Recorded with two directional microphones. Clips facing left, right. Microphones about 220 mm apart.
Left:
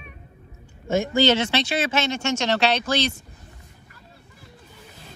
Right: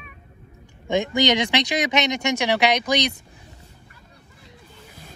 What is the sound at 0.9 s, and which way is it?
Speech, 15° right (ahead or behind).